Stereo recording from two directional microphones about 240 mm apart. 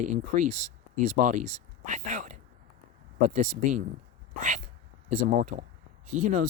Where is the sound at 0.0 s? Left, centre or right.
Right.